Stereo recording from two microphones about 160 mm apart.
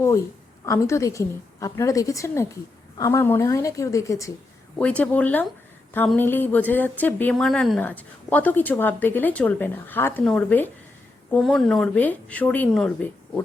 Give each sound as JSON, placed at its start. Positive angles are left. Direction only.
{"t": 0.6, "sound": "a woman's voice", "side_deg": 20}
{"t": 4.8, "sound": "a woman's voice", "side_deg": 10}